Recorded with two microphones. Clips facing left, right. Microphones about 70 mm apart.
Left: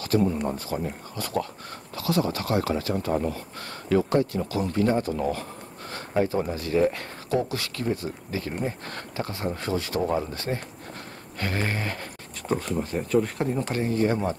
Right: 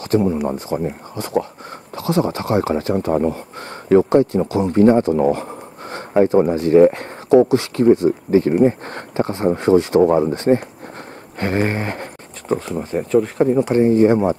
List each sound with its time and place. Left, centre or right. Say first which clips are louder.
0.0 s speech: right 6 dB; right
10.0 s speech: right 11 dB; right
10.3 s speech: right 14 dB; right
12.4 s speech: right 5 dB; centre
13.7 s speech: right 11 dB; right